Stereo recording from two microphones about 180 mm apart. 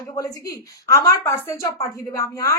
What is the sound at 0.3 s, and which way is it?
A woman's voice, 20° left (ahead or behind).